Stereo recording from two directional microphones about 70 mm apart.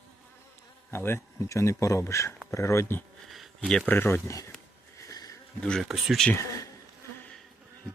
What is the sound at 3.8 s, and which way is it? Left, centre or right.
Speech, left.